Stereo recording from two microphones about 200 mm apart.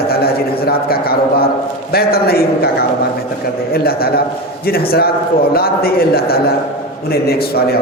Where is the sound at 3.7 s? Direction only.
50° left (ahead or behind).